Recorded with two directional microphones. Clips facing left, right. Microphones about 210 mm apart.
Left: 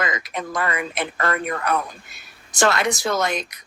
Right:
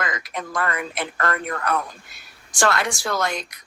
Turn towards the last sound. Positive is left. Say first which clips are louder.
# left 2 dB
turn(degrees=20)  # may be behind; listen again after turning